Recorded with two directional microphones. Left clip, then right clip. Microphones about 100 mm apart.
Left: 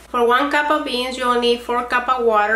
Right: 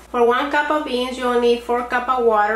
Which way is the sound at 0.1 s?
55° left (ahead or behind).